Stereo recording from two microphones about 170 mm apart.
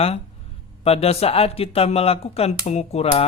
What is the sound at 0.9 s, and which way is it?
Speech, 35° left (ahead or behind).